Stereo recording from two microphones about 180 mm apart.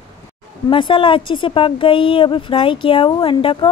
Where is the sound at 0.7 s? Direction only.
30° left (ahead or behind).